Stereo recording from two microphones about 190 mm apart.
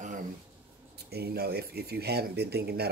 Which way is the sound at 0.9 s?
55° right (ahead or behind).